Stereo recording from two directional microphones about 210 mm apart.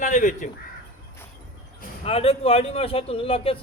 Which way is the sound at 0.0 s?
35° left (ahead or behind).